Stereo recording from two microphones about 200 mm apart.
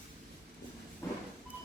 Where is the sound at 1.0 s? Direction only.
15° left (ahead or behind).